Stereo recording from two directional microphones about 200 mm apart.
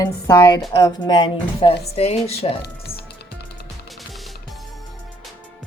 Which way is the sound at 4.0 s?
Centre (ahead or behind).